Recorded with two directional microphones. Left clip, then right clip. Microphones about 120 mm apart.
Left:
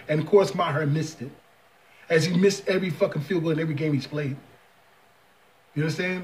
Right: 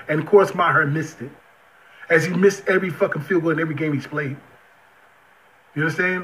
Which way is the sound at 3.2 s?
5° left (ahead or behind).